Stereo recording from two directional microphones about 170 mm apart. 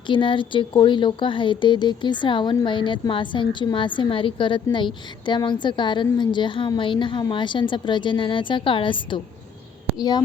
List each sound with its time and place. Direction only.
0.1 s speech: 30° left (ahead or behind)